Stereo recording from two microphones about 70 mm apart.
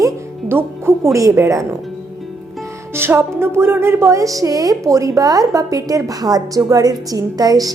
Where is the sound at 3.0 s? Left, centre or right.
Right.